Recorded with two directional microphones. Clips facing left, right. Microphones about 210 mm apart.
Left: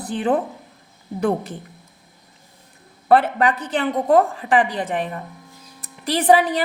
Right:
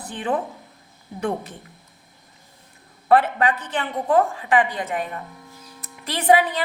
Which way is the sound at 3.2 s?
35° left (ahead or behind).